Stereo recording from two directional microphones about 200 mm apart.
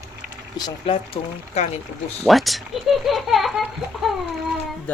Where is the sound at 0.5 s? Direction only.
25° left (ahead or behind).